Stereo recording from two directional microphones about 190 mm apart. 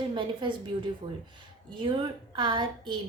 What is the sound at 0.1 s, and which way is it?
Speech, 25° right (ahead or behind).